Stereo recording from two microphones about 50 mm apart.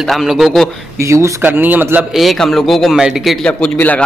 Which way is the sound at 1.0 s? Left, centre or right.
Right.